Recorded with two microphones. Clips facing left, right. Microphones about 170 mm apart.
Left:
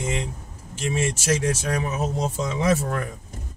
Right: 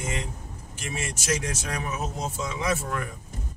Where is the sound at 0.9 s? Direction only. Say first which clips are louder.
Left 5 dB; 30° left (ahead or behind).